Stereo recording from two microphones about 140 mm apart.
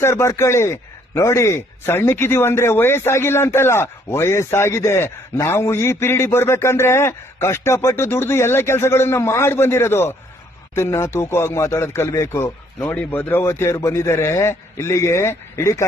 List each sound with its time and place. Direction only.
0.0 s speech: 20° left (ahead or behind)